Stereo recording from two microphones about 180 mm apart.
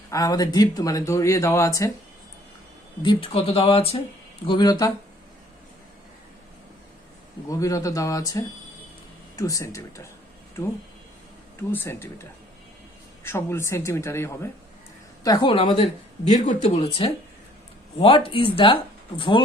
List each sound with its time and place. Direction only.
0.1 s speech: 20° left (ahead or behind)
3.0 s speech: 30° left (ahead or behind)
7.4 s speech: 20° left (ahead or behind)
11.7 s speech: 15° left (ahead or behind)